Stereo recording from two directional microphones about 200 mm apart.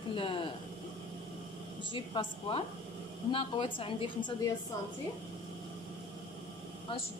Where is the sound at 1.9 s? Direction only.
25° left (ahead or behind).